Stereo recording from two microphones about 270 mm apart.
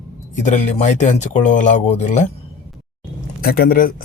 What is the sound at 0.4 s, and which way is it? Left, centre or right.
Speech, left.